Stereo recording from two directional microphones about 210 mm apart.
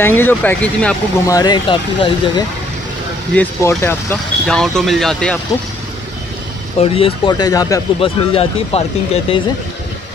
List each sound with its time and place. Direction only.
0.0 s speech: 10° left (ahead or behind)
1.3 s speech: 20° left (ahead or behind)
3.3 s speech: 10° left (ahead or behind)
6.8 s speech: 25° left (ahead or behind)